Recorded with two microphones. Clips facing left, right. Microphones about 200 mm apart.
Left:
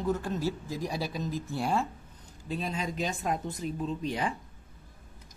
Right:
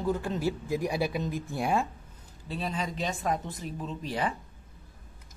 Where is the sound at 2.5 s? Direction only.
Centre (ahead or behind).